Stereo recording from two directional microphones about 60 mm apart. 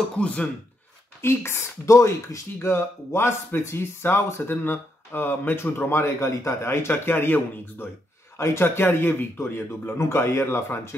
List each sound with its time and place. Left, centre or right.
0.2 s speech: centre
1.2 s speech: left
6.9 s speech: left
8.4 s speech: left
9.9 s speech: left